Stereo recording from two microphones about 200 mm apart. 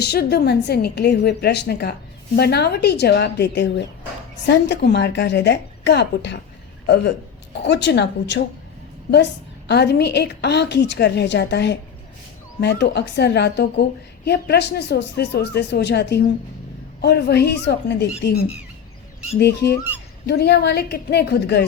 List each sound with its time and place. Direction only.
0.0 s a woman's voice: 55° left (ahead or behind)
19.4 s a woman's voice: 55° left (ahead or behind)